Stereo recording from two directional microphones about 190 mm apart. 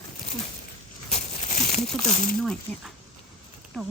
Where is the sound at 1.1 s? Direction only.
35° left (ahead or behind).